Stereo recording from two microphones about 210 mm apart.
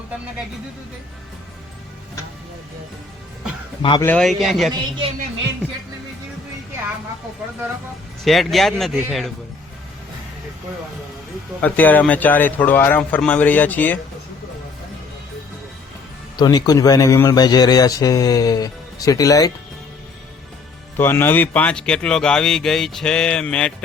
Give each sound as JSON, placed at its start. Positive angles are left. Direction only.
{"t": 4.0, "sound": "speech", "side_deg": 5}
{"t": 4.7, "sound": "a woman's voice", "side_deg": -20}
{"t": 8.2, "sound": "speech", "side_deg": 0}
{"t": 11.6, "sound": "speech", "side_deg": 10}
{"t": 16.4, "sound": "speech", "side_deg": 20}
{"t": 20.9, "sound": "speech", "side_deg": 10}